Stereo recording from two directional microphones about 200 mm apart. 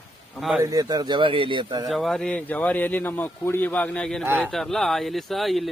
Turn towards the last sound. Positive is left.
turn(degrees=0)  # may be behind; listen again after turning